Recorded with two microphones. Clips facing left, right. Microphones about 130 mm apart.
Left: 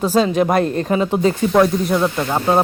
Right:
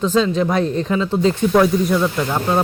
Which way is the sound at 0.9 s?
15° left (ahead or behind).